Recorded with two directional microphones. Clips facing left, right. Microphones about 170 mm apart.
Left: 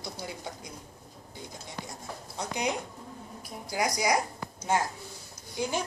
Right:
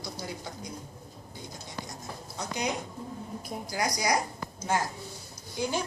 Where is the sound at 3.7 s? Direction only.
20° left (ahead or behind).